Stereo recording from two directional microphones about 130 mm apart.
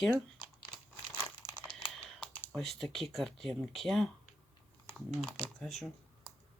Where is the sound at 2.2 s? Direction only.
5° left (ahead or behind).